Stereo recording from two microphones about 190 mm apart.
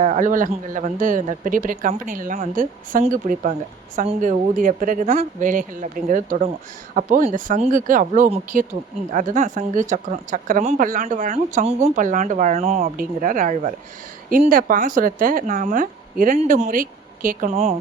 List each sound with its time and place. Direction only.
0.0 s speech: 40° right (ahead or behind)